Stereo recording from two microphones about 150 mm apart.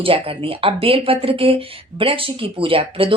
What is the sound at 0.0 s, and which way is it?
Speech, 40° right (ahead or behind).